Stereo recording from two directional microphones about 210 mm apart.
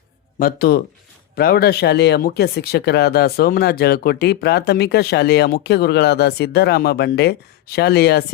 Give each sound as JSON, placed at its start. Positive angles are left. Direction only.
{"t": 0.3, "sound": "speech", "side_deg": 45}